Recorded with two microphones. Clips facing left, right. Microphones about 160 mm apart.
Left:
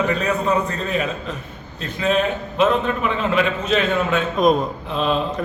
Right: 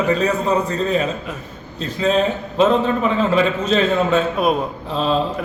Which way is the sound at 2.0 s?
35° right (ahead or behind).